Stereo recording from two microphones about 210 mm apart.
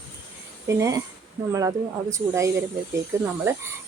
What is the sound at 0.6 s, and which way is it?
A woman's voice, 15° right (ahead or behind).